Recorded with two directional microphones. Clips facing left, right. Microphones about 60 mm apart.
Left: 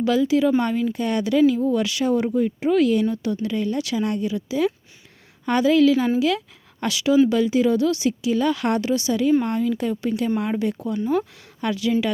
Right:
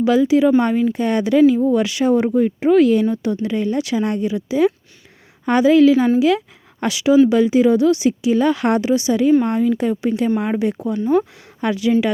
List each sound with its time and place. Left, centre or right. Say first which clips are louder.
0.0 s speech: right 5 dB; right
2.3 s speech: right 6 dB; right
10.9 s speech: right 6 dB; centre
11.2 s speech: right 5 dB; right